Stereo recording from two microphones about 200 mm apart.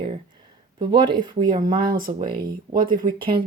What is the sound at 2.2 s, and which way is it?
Speech, 25° right (ahead or behind).